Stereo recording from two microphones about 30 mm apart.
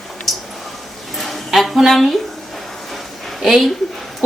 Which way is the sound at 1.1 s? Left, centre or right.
Centre.